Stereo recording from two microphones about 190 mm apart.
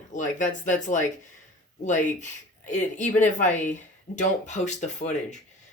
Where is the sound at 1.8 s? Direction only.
40° left (ahead or behind).